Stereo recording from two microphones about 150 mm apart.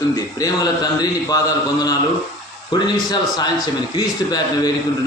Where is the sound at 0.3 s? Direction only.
25° left (ahead or behind).